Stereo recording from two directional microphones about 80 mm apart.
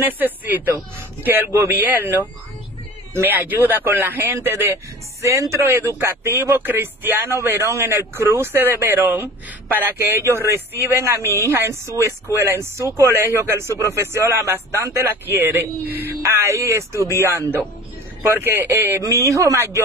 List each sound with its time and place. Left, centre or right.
0.0 s speech: right
3.3 s speech: right